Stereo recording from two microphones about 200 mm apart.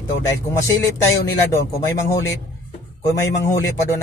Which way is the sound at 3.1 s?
15° left (ahead or behind).